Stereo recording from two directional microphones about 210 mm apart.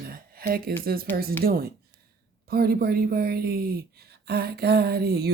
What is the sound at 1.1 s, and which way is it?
Speech, 45° right (ahead or behind).